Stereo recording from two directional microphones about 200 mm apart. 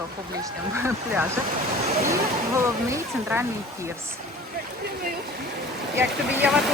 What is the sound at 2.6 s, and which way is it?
Speech, 10° right (ahead or behind).